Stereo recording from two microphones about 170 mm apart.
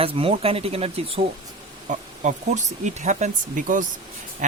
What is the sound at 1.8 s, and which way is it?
Speech, 45° right (ahead or behind).